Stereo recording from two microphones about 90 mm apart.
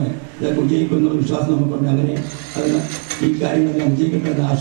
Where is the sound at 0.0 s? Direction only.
15° right (ahead or behind).